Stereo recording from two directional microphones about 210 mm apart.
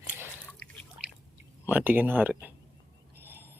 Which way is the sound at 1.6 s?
10° right (ahead or behind).